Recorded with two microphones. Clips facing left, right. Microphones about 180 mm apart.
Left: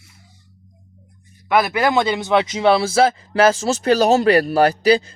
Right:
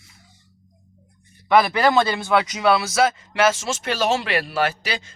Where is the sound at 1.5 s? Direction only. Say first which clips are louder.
Even; 10° left (ahead or behind).